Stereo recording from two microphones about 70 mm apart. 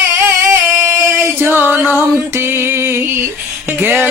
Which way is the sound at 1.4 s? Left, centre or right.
Right.